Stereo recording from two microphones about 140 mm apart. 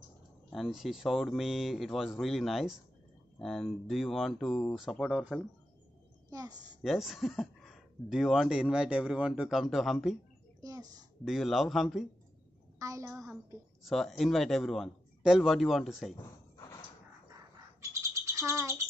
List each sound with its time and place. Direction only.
0.5 s speech: centre (ahead or behind)
6.3 s a woman's voice: 25° right (ahead or behind)
6.8 s speech: centre (ahead or behind)
10.6 s a sound: 25° right (ahead or behind)
11.2 s speech: centre (ahead or behind)
12.7 s a woman's voice: 25° right (ahead or behind)
13.8 s speech: centre (ahead or behind)
16.2 s a sound: 30° left (ahead or behind)
18.2 s rattle: 20° right (ahead or behind)